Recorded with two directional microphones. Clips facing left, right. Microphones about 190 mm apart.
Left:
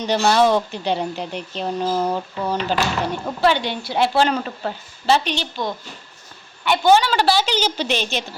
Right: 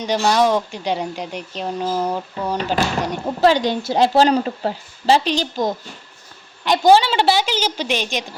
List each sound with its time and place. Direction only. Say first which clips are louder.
0.0 s a woman's voice: even; 10° right (ahead or behind)
1.8 s a sound: even; 5° left (ahead or behind)
3.0 s a woman's voice: right 1 dB; 15° right (ahead or behind)
3.4 s a woman's voice: right 4 dB; 40° right (ahead or behind); by 7.4 s 20° right (ahead or behind)
7.4 s a woman's voice: left 1 dB; 10° right (ahead or behind)